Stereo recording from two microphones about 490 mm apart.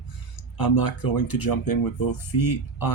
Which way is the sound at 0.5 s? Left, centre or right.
Left.